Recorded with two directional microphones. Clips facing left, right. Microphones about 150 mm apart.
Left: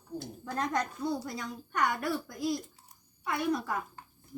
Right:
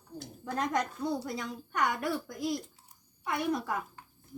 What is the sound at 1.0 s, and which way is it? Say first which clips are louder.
A woman's voice: even; 20° right (ahead or behind).